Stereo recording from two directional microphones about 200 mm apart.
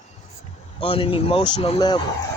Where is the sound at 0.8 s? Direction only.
25° left (ahead or behind).